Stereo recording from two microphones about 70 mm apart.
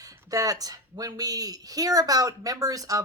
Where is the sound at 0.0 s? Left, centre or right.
Right.